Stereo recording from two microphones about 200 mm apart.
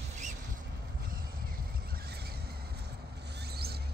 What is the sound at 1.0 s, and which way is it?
Vehicle, 45° right (ahead or behind).